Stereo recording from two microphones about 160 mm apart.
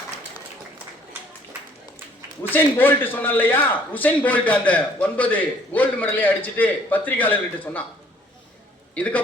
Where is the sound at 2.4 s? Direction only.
15° left (ahead or behind).